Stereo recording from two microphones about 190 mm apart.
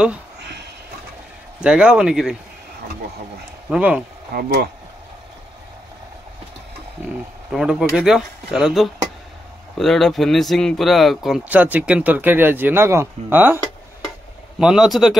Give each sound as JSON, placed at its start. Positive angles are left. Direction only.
{"t": 0.4, "sound": "a sound", "side_deg": -60}
{"t": 1.6, "sound": "speech", "side_deg": -5}
{"t": 3.7, "sound": "speech", "side_deg": -5}
{"t": 4.3, "sound": "speech", "side_deg": -50}
{"t": 7.5, "sound": "speech", "side_deg": 0}
{"t": 14.6, "sound": "speech", "side_deg": -5}